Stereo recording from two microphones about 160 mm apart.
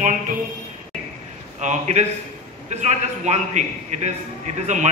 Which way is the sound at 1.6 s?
45° right (ahead or behind).